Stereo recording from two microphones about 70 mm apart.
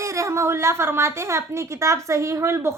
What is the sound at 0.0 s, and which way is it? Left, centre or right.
A woman's voice, right.